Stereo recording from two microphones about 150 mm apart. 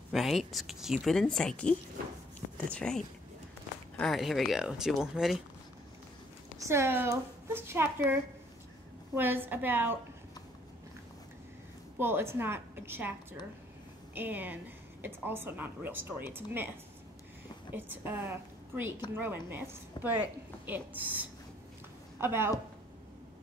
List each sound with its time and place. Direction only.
0.1 s a woman's voice: centre (ahead or behind)
4.0 s a woman's voice: centre (ahead or behind)
6.6 s a woman's voice: 15° right (ahead or behind)
12.0 s a woman's voice: 15° right (ahead or behind)